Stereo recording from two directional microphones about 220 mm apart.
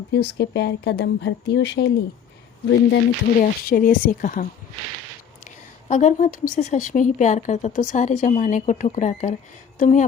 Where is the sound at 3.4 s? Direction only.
40° left (ahead or behind).